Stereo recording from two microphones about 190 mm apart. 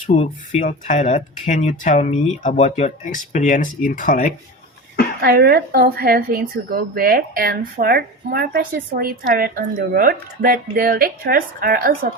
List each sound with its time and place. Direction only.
0.2 s speech: 40° left (ahead or behind)
5.2 s a woman's voice: 55° right (ahead or behind)